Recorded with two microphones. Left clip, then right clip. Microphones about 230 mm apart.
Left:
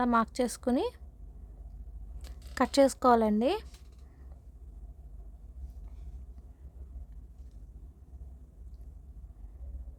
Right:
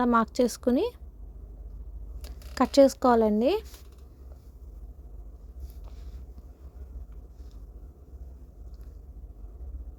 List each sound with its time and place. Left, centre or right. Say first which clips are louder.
0.0 s speech: right 4 dB; centre
2.2 s speech: right 3 dB; centre